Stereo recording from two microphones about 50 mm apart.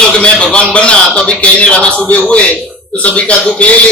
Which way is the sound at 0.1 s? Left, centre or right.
Centre.